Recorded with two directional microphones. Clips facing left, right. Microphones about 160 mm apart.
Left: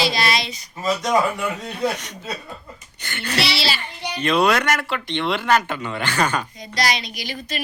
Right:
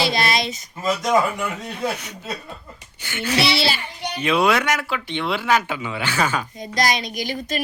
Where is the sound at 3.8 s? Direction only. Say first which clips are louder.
Even; 10° right (ahead or behind).